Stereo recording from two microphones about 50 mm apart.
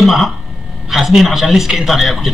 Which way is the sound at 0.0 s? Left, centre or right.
Centre.